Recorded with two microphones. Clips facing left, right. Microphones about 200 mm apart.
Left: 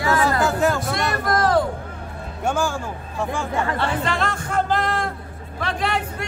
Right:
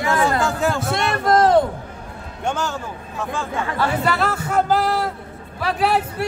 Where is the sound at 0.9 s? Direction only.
25° right (ahead or behind).